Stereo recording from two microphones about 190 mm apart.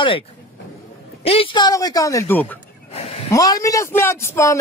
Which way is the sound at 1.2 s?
30° left (ahead or behind).